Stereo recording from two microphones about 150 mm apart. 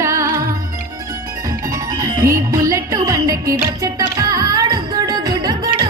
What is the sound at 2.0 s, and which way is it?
Music, 25° right (ahead or behind).